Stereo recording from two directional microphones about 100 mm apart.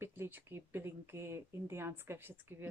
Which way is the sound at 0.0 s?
20° right (ahead or behind).